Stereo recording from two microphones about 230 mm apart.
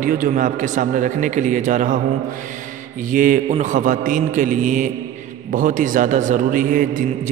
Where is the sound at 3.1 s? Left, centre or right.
Right.